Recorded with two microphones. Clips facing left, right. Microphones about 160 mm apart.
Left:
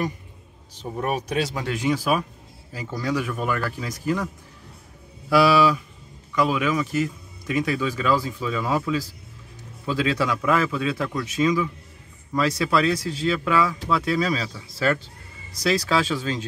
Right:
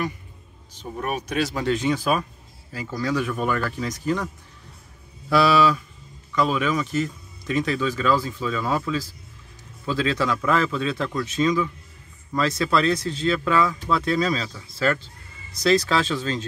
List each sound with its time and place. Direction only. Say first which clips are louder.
0.8 s speech: left 2 dB; 25° left (ahead or behind)
1.5 s speech: right 2 dB; 10° left (ahead or behind)
5.3 s speech: left 1 dB; 10° left (ahead or behind)